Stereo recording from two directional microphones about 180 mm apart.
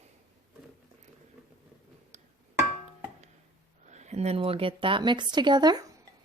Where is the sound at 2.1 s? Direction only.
40° right (ahead or behind).